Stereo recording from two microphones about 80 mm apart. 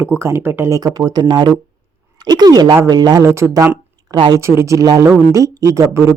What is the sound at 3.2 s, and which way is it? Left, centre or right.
Speech, right.